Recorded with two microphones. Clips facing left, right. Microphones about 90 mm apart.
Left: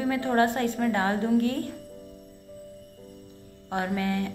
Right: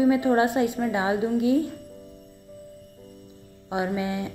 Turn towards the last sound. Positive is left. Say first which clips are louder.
# right 1 dB
turn(degrees=-15)  # may be behind; listen again after turning